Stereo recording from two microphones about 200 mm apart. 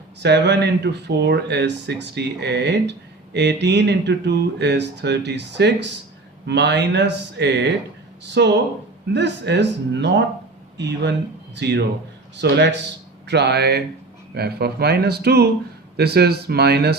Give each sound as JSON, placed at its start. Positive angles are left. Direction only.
{"t": 0.2, "sound": "speech", "side_deg": -60}